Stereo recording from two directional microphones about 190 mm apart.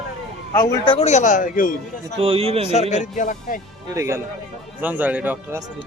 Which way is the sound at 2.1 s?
30° right (ahead or behind).